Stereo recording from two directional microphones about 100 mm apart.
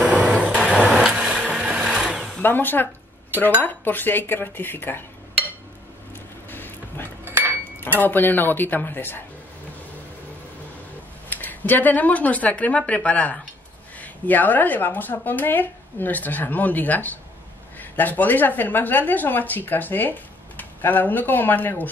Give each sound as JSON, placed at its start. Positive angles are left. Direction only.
{"t": 0.0, "sound": "vehicle", "side_deg": -10}
{"t": 0.7, "sound": "blender", "side_deg": -10}
{"t": 2.4, "sound": "a woman's voice", "side_deg": 20}
{"t": 6.5, "sound": "a sound", "side_deg": 20}
{"t": 7.2, "sound": "a sound", "side_deg": -20}
{"t": 7.8, "sound": "a woman's voice", "side_deg": 20}
{"t": 11.2, "sound": "a woman's voice", "side_deg": 15}